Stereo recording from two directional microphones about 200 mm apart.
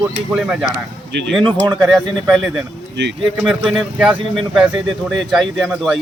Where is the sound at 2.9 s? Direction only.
60° right (ahead or behind).